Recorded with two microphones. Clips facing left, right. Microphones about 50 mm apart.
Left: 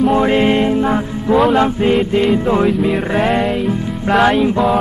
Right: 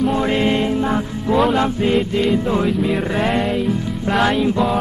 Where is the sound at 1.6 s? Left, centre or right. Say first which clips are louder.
Left 4 dB; left.